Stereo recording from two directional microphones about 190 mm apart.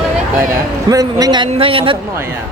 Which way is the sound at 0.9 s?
20° right (ahead or behind).